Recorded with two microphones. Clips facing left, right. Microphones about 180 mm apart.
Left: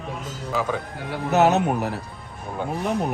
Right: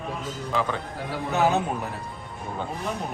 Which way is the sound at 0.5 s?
Centre (ahead or behind).